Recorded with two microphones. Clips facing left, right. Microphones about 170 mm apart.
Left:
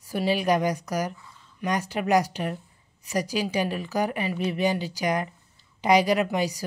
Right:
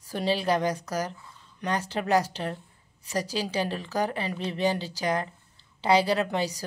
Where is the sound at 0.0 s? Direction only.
10° left (ahead or behind).